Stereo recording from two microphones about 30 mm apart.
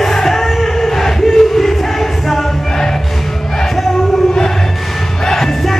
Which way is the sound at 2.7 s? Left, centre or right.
Left.